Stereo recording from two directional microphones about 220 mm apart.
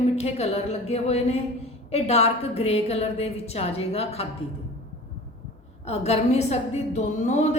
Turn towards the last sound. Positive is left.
turn(degrees=30)  # may be behind; listen again after turning